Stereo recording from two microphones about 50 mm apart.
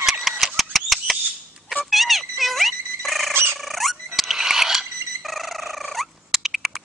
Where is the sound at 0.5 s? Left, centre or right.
Centre.